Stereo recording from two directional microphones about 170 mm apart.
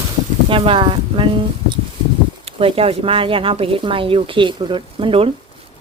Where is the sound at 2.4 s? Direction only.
35° right (ahead or behind).